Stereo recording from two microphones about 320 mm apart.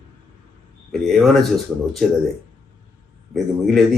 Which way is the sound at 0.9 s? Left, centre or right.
Centre.